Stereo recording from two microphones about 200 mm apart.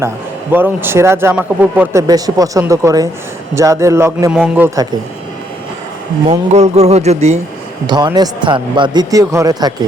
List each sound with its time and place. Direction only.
0.5 s speech: 10° right (ahead or behind)
6.5 s speech: 35° right (ahead or behind)
7.9 s a man's voice: 20° right (ahead or behind)